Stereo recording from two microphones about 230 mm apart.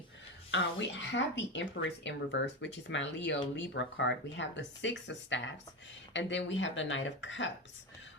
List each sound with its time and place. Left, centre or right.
0.5 s speech: left